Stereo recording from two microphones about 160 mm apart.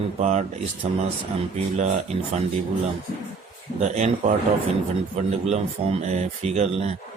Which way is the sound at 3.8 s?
45° right (ahead or behind).